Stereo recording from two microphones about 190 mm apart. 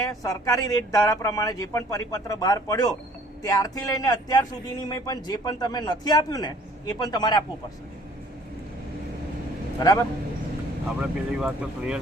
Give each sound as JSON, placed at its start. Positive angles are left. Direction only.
{"t": 0.1, "sound": "a man's voice", "side_deg": 20}
{"t": 9.8, "sound": "a man's voice", "side_deg": 20}
{"t": 10.8, "sound": "speech", "side_deg": -5}